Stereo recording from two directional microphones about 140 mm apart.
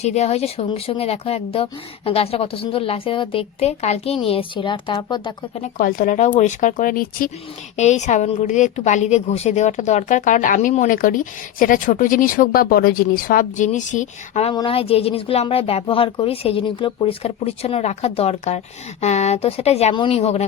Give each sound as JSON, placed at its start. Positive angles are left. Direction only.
{"t": 0.0, "sound": "a woman's voice", "side_deg": 50}
{"t": 5.5, "sound": "speech", "side_deg": 75}
{"t": 7.8, "sound": "a woman's voice", "side_deg": 55}
{"t": 13.7, "sound": "a woman's voice", "side_deg": 60}
{"t": 14.5, "sound": "speech", "side_deg": 40}